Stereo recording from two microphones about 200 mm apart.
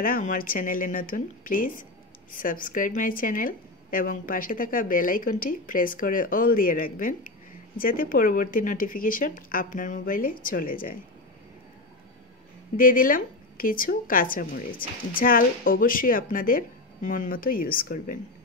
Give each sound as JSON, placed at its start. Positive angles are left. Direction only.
{"t": 0.0, "sound": "a woman's voice", "side_deg": 45}
{"t": 12.7, "sound": "a woman's voice", "side_deg": 45}